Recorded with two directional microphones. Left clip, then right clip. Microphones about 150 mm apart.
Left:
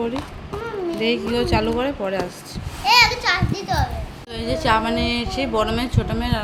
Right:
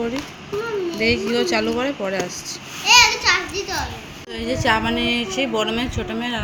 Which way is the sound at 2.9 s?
90° left.